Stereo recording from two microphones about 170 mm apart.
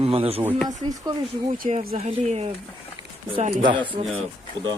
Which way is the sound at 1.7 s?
40° right (ahead or behind).